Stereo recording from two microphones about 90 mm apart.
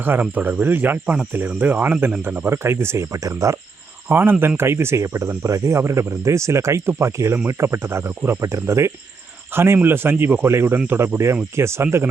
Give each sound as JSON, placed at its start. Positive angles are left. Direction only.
{"t": 0.0, "sound": "speech", "side_deg": -20}
{"t": 4.1, "sound": "speech", "side_deg": -25}